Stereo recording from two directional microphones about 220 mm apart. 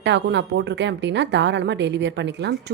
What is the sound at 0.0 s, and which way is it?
A woman's voice, 50° right (ahead or behind).